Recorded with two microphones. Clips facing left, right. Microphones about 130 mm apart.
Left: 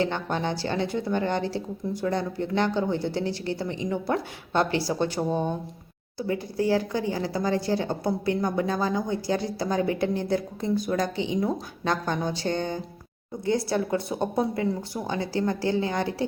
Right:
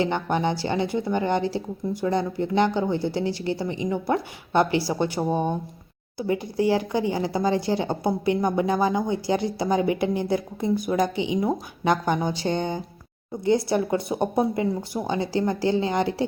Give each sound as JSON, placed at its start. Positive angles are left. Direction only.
{"t": 0.0, "sound": "speech", "side_deg": -15}